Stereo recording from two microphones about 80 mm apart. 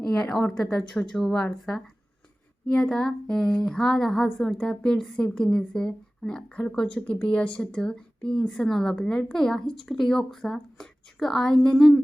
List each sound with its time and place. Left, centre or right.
0.0 s speech: centre
2.6 s speech: centre